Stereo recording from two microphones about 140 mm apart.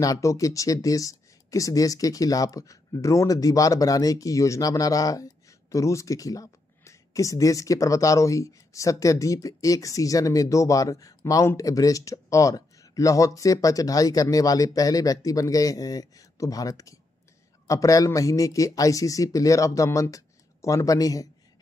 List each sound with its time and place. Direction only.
0.0 s speech: 25° left (ahead or behind)